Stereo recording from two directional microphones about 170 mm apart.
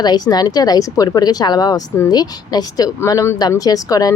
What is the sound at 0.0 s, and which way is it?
Speech, 25° left (ahead or behind).